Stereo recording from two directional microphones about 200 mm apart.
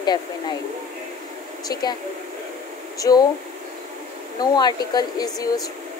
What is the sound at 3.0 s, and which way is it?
Speech, 20° left (ahead or behind).